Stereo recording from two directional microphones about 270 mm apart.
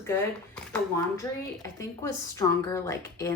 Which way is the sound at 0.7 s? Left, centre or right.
Centre.